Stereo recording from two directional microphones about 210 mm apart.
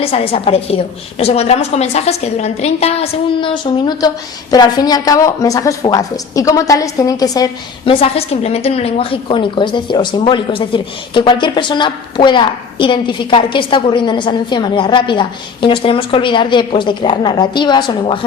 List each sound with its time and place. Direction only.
0.0 s a woman's voice: 25° left (ahead or behind)